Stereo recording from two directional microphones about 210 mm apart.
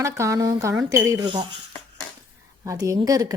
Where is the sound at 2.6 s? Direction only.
15° right (ahead or behind).